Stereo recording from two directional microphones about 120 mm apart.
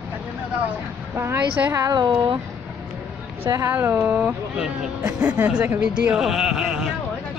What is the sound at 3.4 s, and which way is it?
Speech, 20° right (ahead or behind).